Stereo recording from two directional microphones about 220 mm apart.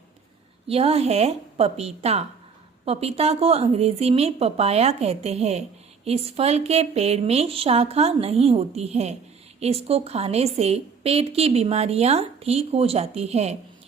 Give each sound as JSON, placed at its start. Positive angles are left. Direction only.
{"t": 0.7, "sound": "a woman's voice", "side_deg": -25}